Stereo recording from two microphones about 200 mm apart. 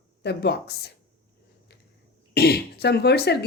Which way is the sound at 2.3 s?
55° left (ahead or behind).